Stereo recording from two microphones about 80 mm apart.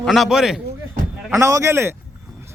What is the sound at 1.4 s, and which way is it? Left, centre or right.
Speech, right.